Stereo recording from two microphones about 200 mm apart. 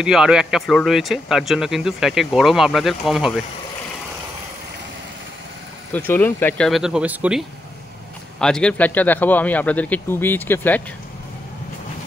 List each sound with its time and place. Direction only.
0.0 s speech: 5° right (ahead or behind)
5.9 s speech: 10° left (ahead or behind)
6.7 s speech: 5° right (ahead or behind)